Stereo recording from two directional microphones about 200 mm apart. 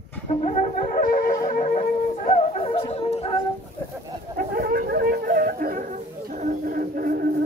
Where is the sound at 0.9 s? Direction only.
45° left (ahead or behind).